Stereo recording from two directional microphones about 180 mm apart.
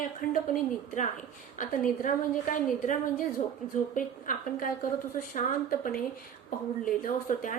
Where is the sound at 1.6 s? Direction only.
45° left (ahead or behind).